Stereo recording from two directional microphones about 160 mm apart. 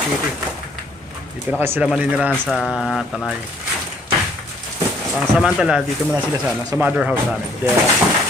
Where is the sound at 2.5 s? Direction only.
5° left (ahead or behind).